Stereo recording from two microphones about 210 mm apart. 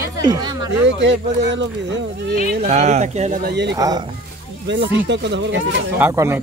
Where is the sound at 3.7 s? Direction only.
15° right (ahead or behind).